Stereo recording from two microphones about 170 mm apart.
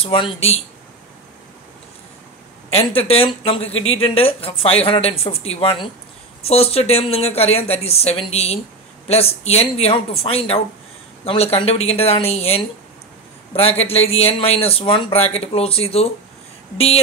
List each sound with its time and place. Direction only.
0.0 s speech: 30° left (ahead or behind)
2.7 s speech: 35° left (ahead or behind)